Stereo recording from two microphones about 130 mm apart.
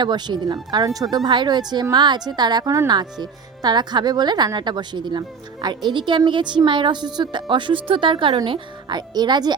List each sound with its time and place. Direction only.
0.0 s speech: 35° right (ahead or behind)